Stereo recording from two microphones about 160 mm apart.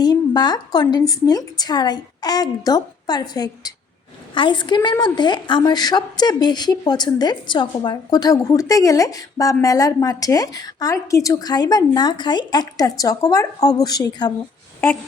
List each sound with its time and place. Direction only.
0.0 s a woman's voice: 25° left (ahead or behind)